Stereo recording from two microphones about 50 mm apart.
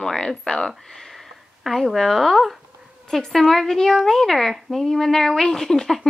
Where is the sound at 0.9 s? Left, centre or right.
Centre.